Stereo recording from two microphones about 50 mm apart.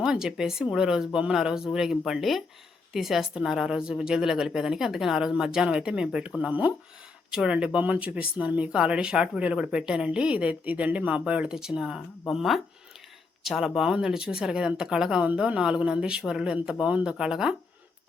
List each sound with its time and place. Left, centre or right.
0.0 s a woman's voice: centre
6.5 s speech: right
7.3 s speech: centre
10.3 s speech: right
11.5 s a woman's voice: centre
12.3 s a woman's voice: centre